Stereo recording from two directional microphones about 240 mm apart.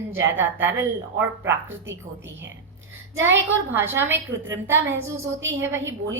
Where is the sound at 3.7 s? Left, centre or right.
Centre.